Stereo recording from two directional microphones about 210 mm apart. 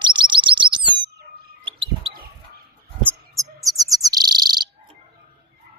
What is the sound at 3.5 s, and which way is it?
Bird, 15° right (ahead or behind).